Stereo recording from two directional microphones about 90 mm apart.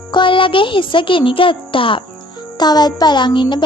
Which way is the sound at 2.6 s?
50° left (ahead or behind).